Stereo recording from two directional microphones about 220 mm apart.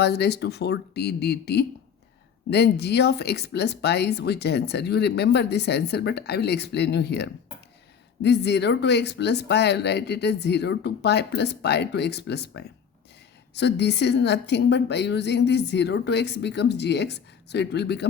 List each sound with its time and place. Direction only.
0.0 s speech: 50° left (ahead or behind)